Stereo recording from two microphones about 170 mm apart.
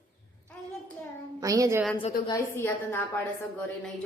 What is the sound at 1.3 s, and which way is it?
Speech, 20° right (ahead or behind).